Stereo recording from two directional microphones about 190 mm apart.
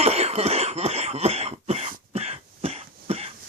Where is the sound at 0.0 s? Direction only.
35° right (ahead or behind).